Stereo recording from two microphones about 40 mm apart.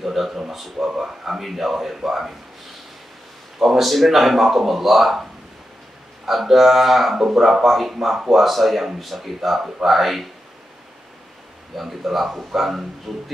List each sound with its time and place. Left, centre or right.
0.0 s speech: centre
3.5 s speech: centre
11.7 s speech: centre